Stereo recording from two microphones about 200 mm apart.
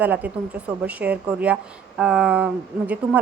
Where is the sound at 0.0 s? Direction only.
10° right (ahead or behind).